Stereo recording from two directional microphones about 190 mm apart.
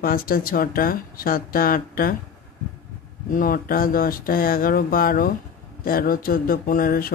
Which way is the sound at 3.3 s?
45° left (ahead or behind).